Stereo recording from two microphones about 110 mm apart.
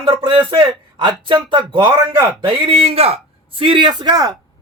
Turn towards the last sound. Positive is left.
turn(degrees=-35)  # may be behind; listen again after turning